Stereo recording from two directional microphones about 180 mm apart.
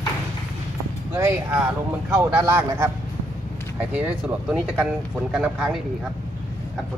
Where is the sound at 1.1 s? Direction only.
15° right (ahead or behind).